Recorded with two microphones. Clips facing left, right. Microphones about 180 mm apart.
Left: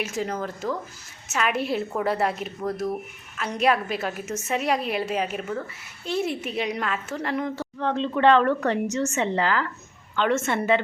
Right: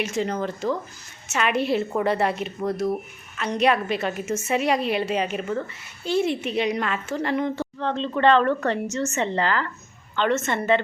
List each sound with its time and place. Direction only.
0.0 s a woman's voice: 5° left (ahead or behind)